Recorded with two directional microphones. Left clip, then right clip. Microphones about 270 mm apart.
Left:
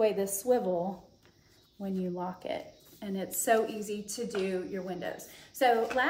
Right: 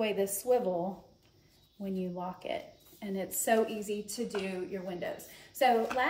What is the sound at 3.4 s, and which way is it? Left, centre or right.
A woman's voice, centre.